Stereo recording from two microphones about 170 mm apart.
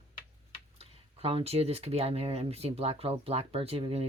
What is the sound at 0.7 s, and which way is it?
Speech, 35° right (ahead or behind).